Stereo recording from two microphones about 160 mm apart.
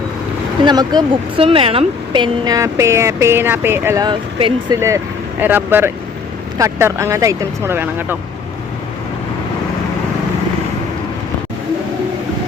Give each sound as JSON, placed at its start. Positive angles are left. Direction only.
{"t": 0.6, "sound": "speech", "side_deg": -25}
{"t": 4.0, "sound": "speech", "side_deg": -30}
{"t": 5.4, "sound": "speech", "side_deg": -10}